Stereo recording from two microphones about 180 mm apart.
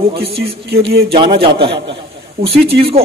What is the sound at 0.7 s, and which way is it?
Speech, 60° right (ahead or behind).